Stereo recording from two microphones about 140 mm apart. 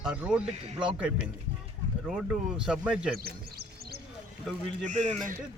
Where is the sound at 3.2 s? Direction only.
90° right.